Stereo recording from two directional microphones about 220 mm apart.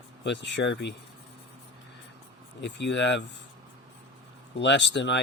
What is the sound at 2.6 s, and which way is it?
Speech, 55° left (ahead or behind).